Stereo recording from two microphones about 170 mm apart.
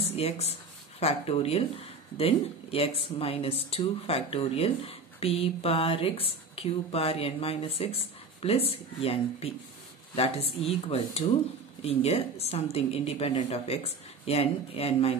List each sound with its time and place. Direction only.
0.1 s speech: 35° left (ahead or behind)
11.8 s speech: 35° left (ahead or behind)